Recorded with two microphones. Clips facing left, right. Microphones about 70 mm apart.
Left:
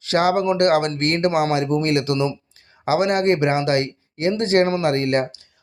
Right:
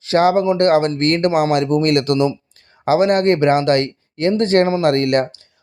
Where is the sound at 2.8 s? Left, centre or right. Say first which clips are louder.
Right 4 dB; right.